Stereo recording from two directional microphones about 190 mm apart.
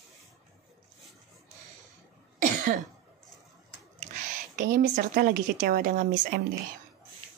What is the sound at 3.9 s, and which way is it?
Speech, 40° right (ahead or behind).